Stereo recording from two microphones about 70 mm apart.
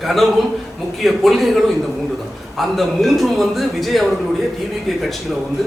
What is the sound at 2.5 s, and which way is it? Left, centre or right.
A man's voice, centre.